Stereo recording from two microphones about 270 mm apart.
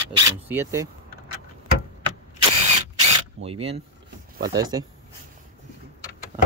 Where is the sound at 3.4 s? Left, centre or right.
Right.